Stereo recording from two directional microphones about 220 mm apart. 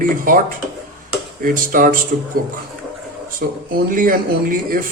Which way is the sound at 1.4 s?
40° right (ahead or behind).